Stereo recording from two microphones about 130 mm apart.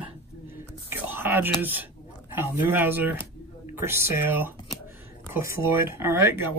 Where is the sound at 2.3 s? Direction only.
15° right (ahead or behind).